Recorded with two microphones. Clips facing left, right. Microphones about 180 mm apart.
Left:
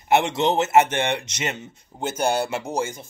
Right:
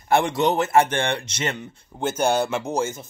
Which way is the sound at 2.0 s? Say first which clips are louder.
Right 2 dB; 10° left (ahead or behind).